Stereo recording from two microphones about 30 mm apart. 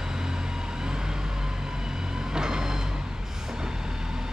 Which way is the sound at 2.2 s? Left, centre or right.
Right.